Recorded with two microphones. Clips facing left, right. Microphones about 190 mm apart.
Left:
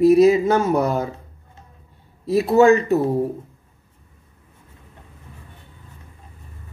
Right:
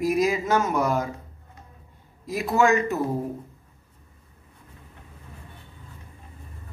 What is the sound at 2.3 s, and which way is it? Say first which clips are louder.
Speech: left 8 dB; 35° left (ahead or behind).